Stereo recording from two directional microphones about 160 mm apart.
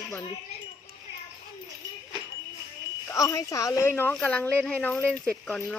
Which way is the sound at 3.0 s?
20° left (ahead or behind).